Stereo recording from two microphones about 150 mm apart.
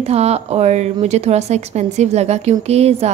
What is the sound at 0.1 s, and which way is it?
A woman's voice, 45° right (ahead or behind).